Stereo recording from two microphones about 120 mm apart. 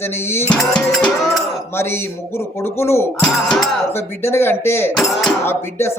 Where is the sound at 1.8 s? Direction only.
20° left (ahead or behind).